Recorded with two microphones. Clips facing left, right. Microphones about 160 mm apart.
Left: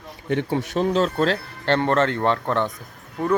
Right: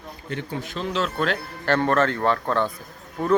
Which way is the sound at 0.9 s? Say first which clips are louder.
Left 3 dB; 40° left (ahead or behind).